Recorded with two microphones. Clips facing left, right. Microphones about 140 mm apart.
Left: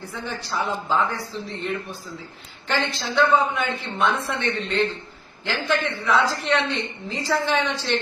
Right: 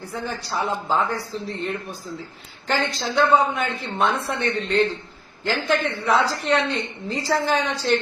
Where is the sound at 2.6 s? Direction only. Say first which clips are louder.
Right 2 dB; 40° right (ahead or behind).